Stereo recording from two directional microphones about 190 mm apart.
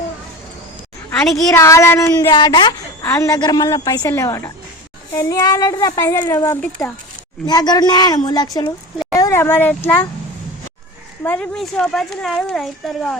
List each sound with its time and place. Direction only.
1.4 s a child's voice: 15° left (ahead or behind)
7.4 s a woman's voice: 20° left (ahead or behind)
11.2 s speech: 10° left (ahead or behind)